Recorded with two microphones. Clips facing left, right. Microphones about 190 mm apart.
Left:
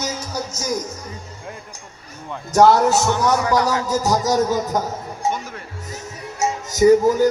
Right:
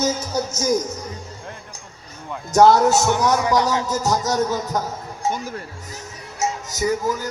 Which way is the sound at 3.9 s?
15° left (ahead or behind).